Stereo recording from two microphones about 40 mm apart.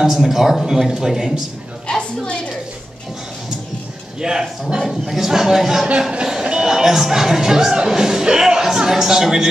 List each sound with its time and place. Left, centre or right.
0.0 s speech: centre
1.9 s a sound: left
4.2 s speech: centre
4.7 s speech: centre